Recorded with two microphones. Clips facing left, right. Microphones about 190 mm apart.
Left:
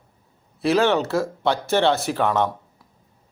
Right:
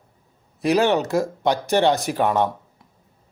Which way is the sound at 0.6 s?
15° right (ahead or behind).